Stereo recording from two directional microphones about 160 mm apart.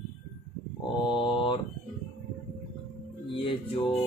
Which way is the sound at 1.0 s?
30° left (ahead or behind).